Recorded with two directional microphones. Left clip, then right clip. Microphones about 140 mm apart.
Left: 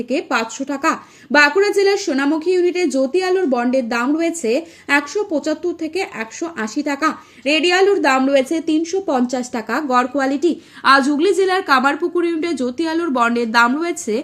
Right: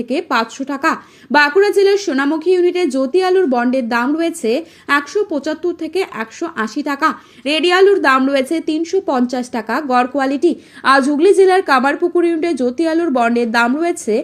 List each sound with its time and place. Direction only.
0.0 s speech: 40° right (ahead or behind); by 14.2 s 15° right (ahead or behind)